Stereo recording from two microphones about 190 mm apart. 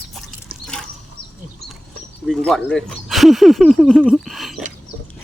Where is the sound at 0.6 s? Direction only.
5° left (ahead or behind).